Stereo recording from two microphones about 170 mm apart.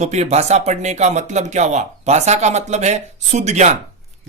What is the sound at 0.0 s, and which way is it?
Speech, 40° right (ahead or behind).